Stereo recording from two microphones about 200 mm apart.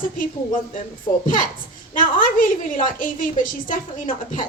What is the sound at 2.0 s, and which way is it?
A woman's voice, 45° left (ahead or behind).